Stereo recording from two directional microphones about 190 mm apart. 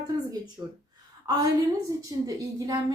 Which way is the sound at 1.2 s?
15° right (ahead or behind).